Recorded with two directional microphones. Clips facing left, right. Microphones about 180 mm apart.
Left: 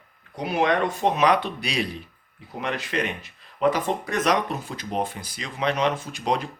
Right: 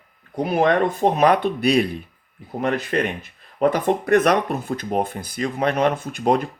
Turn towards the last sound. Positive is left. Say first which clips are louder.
# right 6 dB
turn(degrees=-50)  # may be behind; listen again after turning